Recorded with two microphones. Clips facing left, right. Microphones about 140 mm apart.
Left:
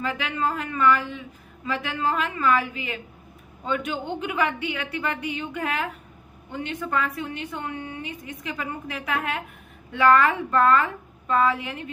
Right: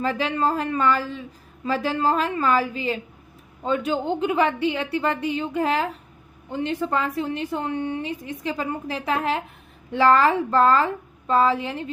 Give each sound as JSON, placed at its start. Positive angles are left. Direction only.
{"t": 0.0, "sound": "a woman's voice", "side_deg": -35}